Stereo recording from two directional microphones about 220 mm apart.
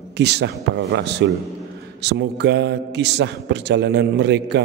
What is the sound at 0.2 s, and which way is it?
A man's voice, 50° right (ahead or behind).